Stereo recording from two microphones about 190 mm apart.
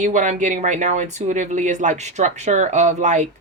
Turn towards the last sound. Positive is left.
turn(degrees=-40)  # may be behind; listen again after turning